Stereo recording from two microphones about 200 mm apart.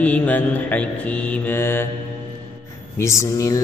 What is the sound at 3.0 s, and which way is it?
Mantra, 15° left (ahead or behind).